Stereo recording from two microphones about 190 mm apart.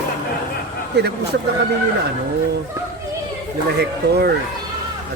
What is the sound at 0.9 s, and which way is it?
Speech, 60° right (ahead or behind).